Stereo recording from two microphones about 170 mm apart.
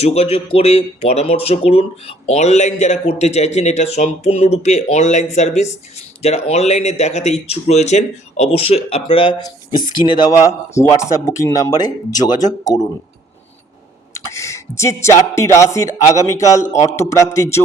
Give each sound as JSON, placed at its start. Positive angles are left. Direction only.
{"t": 0.0, "sound": "speech", "side_deg": 40}
{"t": 14.3, "sound": "a man's voice", "side_deg": 15}